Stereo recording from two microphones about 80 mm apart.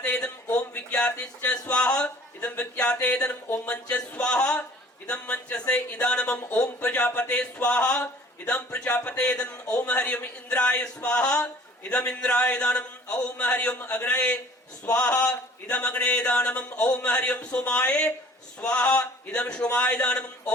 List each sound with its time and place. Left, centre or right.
0.0 s a sound: centre
0.5 s a man's voice: centre
9.6 s speech: left
9.9 s a man's voice: centre